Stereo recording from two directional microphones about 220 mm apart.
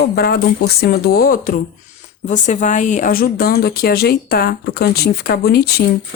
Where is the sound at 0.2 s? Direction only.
45° left (ahead or behind).